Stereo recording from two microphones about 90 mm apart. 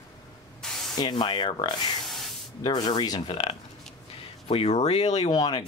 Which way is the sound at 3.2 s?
90° left.